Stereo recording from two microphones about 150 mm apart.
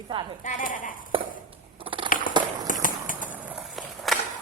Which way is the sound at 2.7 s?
65° left (ahead or behind).